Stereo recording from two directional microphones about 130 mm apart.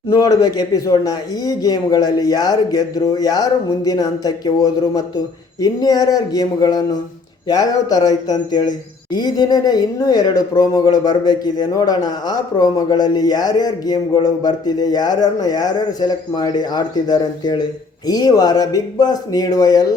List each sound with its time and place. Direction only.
0.1 s speech: 30° left (ahead or behind)